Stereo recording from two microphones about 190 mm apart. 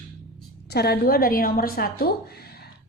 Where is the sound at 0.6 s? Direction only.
60° left (ahead or behind).